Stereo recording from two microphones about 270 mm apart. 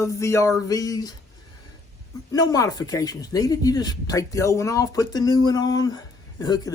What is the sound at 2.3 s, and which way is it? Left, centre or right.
Speech, centre.